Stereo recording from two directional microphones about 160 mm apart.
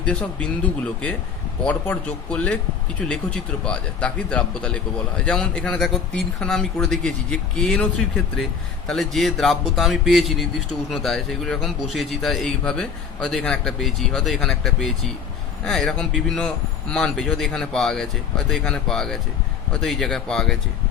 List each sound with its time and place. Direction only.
0.0 s a man's voice: 5° left (ahead or behind)